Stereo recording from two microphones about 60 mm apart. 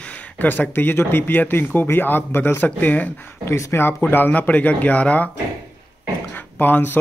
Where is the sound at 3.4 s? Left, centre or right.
Left.